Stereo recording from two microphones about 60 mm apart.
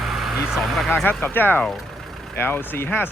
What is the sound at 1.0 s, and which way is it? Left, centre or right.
Speech, left.